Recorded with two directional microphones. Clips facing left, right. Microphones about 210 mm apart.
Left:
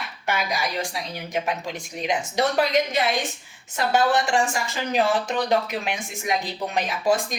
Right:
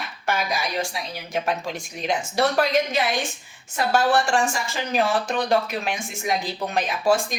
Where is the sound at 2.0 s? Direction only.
15° left (ahead or behind).